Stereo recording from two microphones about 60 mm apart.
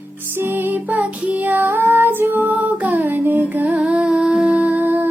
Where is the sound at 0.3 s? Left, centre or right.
Right.